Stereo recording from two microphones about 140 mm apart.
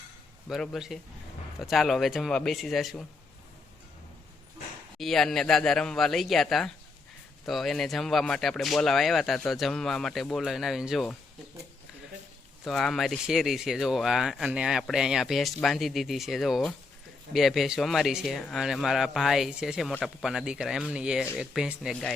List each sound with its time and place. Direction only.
0.4 s speech: centre (ahead or behind)
4.9 s speech: centre (ahead or behind)
12.6 s speech: centre (ahead or behind)